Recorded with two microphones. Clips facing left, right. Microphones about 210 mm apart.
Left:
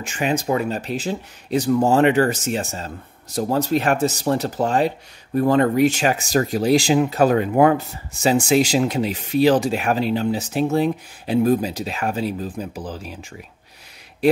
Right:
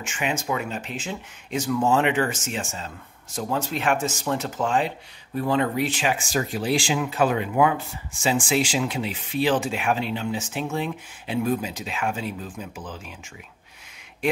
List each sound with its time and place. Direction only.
0.0 s speech: 35° left (ahead or behind)
14.2 s speech: 35° left (ahead or behind)